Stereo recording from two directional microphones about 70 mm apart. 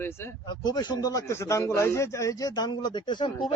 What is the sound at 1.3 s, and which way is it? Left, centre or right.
Speech, left.